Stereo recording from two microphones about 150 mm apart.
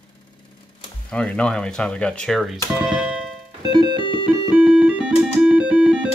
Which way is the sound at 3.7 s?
30° right (ahead or behind).